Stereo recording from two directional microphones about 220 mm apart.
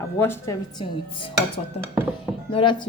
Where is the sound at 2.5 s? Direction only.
20° left (ahead or behind).